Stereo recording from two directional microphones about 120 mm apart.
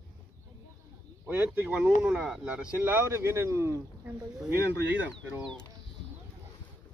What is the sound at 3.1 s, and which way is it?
Speech, 25° right (ahead or behind).